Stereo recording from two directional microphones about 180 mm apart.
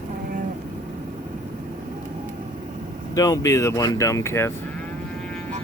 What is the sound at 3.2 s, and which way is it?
Speech, 20° left (ahead or behind).